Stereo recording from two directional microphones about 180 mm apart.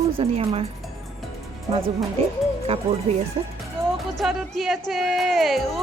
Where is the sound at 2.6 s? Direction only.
35° right (ahead or behind).